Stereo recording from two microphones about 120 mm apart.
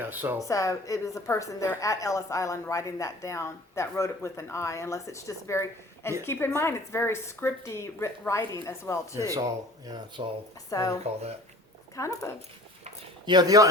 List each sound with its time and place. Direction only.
0.0 s speech: 15° right (ahead or behind)
0.4 s a woman's voice: 25° left (ahead or behind)
9.2 s speech: 25° right (ahead or behind)
10.7 s a woman's voice: 30° left (ahead or behind)
11.0 s speech: 60° right (ahead or behind)
11.9 s a woman's voice: 25° left (ahead or behind)
13.2 s speech: 35° right (ahead or behind)